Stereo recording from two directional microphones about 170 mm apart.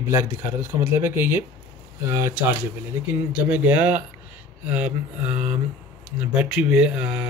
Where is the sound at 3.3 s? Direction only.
10° right (ahead or behind).